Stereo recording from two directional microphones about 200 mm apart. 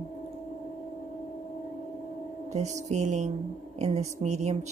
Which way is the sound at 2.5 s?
35° right (ahead or behind).